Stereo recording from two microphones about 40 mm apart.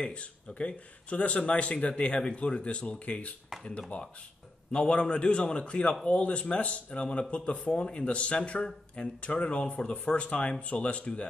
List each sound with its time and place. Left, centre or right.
0.0 s speech: left